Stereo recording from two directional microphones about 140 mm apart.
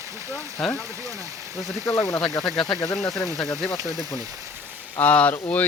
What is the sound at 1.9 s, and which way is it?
Speech, centre (ahead or behind).